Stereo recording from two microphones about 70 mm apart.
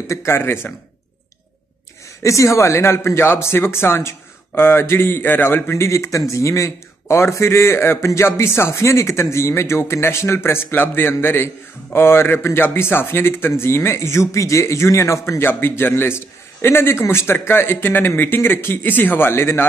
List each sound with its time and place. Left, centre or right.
0.0 s speech: left
2.2 s speech: left